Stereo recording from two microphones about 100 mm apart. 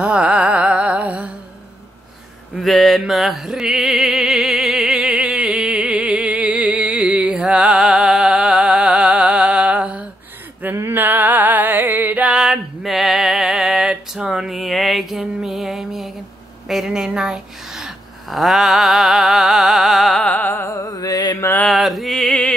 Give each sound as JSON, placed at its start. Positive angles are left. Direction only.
{"t": 0.0, "sound": "music", "side_deg": -10}
{"t": 2.5, "sound": "mantra", "side_deg": 0}
{"t": 3.0, "sound": "music", "side_deg": 0}
{"t": 16.6, "sound": "speech", "side_deg": -5}
{"t": 20.2, "sound": "music", "side_deg": 15}
{"t": 20.9, "sound": "mantra", "side_deg": 40}
{"t": 21.4, "sound": "mantra", "side_deg": 25}
{"t": 21.6, "sound": "music", "side_deg": 0}